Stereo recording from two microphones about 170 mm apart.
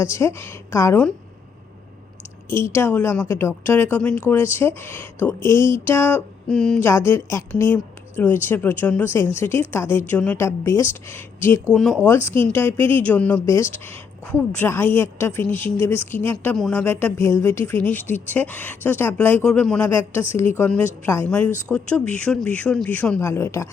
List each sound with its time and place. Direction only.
0.0 s a woman's voice: 15° left (ahead or behind)
2.5 s a woman's voice: 15° left (ahead or behind)
11.7 s speech: 5° left (ahead or behind)
12.0 s a woman's voice: 15° left (ahead or behind)